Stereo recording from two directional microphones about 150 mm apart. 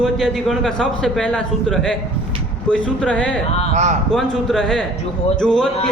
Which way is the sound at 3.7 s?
50° right (ahead or behind).